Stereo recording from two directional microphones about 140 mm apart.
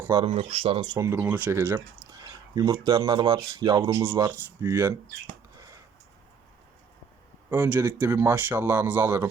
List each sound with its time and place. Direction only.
0.3 s speech: 45° right (ahead or behind)
0.9 s speech: 20° right (ahead or behind)
5.5 s a sound: 25° right (ahead or behind)
7.5 s speech: 15° right (ahead or behind)